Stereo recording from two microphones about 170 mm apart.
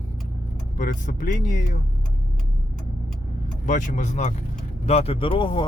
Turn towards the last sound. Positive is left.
turn(degrees=30)  # may be behind; listen again after turning